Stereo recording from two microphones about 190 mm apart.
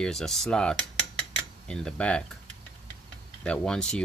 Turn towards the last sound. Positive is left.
turn(degrees=5)  # may be behind; listen again after turning